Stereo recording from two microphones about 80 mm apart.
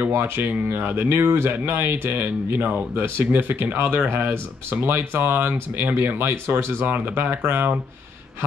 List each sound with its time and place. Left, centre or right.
0.1 s speech: right
3.8 s speech: centre
4.1 s speech: right